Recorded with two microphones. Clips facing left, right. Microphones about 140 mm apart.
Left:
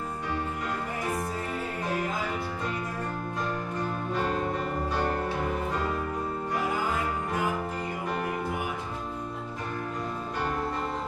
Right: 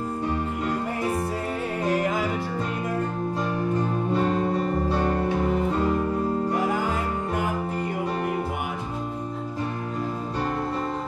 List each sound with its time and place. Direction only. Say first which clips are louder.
4.1 s music: right 5 dB; 30° right (ahead or behind)